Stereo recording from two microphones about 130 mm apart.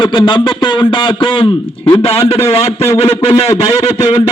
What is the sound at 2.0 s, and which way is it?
Speech, 50° left (ahead or behind).